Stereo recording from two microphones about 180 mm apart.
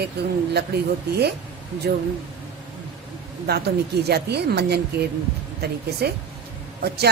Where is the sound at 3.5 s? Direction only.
65° right (ahead or behind).